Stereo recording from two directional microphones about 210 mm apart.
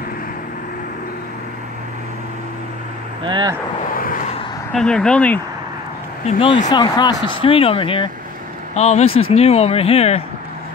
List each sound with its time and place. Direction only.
3.3 s speech: 20° right (ahead or behind)
3.9 s vehicle: 40° left (ahead or behind)
4.7 s speech: 5° left (ahead or behind)
6.2 s speech: 30° left (ahead or behind)